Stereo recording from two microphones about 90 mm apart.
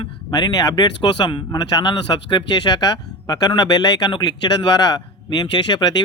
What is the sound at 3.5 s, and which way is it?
A man's voice, 55° left (ahead or behind).